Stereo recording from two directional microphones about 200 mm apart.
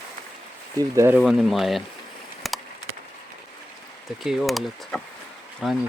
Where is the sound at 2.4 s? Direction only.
Centre (ahead or behind).